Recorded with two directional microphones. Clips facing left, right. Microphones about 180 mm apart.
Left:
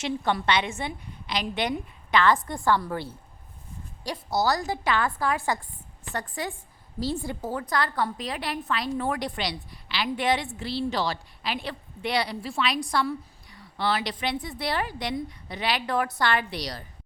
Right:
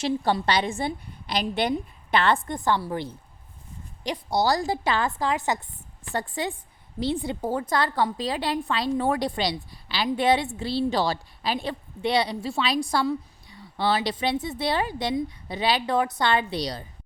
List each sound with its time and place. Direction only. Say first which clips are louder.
0.0 s a woman's voice: right 3 dB; 35° right (ahead or behind)